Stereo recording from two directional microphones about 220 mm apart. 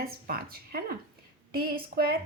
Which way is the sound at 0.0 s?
45° right (ahead or behind).